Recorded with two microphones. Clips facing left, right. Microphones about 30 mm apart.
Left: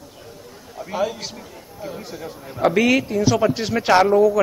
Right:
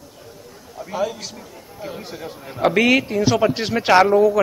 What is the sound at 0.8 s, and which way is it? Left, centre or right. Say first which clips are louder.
Speech: even; centre.